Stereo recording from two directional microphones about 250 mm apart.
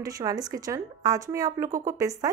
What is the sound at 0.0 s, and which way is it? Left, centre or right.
A woman's voice, centre.